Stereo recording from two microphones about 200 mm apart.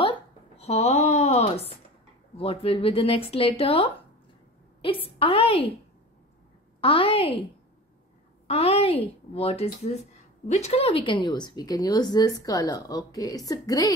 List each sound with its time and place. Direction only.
0.0 s a sound: 25° left (ahead or behind)
2.3 s speech: 30° left (ahead or behind)
4.8 s speech: 25° left (ahead or behind)
6.8 s speech: 25° left (ahead or behind)
8.5 s speech: 30° left (ahead or behind)